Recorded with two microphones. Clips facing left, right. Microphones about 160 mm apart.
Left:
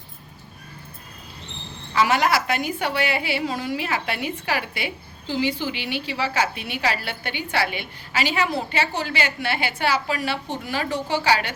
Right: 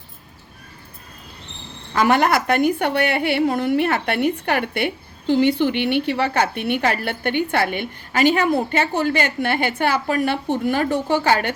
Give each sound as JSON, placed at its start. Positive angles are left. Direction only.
{"t": 1.9, "sound": "a woman's voice", "side_deg": -50}